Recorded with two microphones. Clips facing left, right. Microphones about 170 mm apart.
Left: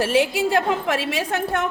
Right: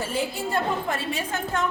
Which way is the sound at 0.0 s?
85° left.